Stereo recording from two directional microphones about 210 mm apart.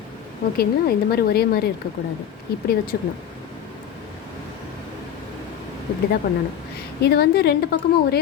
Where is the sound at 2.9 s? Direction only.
50° left (ahead or behind).